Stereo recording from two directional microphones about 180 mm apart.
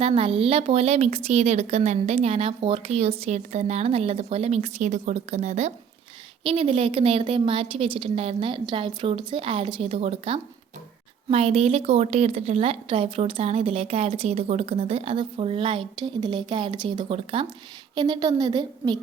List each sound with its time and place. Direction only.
0.0 s a woman's voice: 30° right (ahead or behind)